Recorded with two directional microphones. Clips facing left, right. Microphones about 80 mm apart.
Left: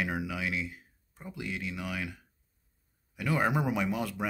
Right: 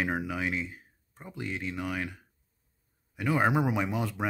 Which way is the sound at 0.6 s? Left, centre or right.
Right.